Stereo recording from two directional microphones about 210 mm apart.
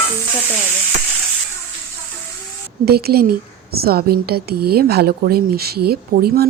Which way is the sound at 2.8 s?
50° right (ahead or behind).